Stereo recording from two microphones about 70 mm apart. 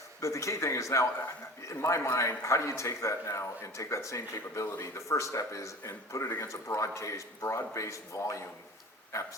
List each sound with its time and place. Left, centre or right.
0.2 s a man's voice: left